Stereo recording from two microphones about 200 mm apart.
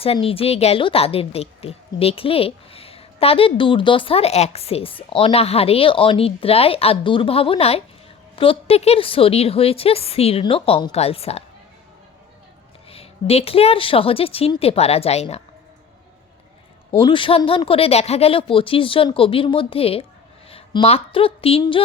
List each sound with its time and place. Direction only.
0.0 s a woman's voice: 30° left (ahead or behind)
12.9 s a woman's voice: 30° left (ahead or behind)
17.0 s a woman's voice: 25° left (ahead or behind)